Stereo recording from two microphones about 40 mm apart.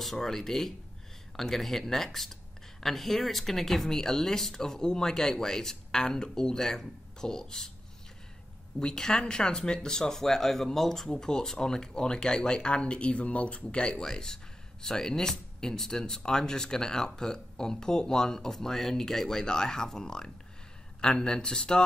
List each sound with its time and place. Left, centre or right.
0.0 s speech: centre
8.7 s speech: centre